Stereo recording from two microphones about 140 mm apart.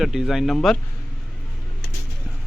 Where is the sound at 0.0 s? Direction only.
Centre (ahead or behind).